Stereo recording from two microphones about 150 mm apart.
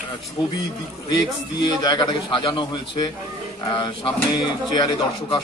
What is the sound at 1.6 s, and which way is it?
Speech, 30° left (ahead or behind).